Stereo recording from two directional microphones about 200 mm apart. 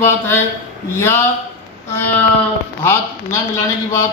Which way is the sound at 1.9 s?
10° left (ahead or behind).